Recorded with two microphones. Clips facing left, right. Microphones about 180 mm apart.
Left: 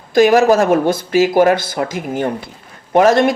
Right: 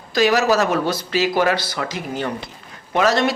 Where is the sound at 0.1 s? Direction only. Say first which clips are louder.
Left 6 dB; 50° left (ahead or behind).